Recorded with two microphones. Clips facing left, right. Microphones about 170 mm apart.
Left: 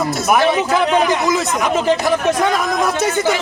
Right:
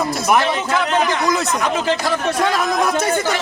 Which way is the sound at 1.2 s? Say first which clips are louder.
Left 1 dB; centre (ahead or behind).